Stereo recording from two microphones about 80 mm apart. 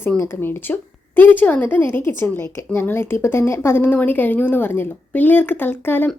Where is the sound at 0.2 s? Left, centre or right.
Left.